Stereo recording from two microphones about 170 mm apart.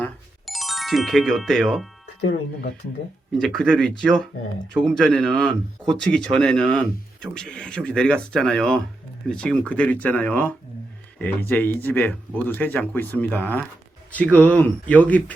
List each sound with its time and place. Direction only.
0.0 s music: centre (ahead or behind)
2.2 s speech: 70° left (ahead or behind)
3.3 s speech: 5° left (ahead or behind)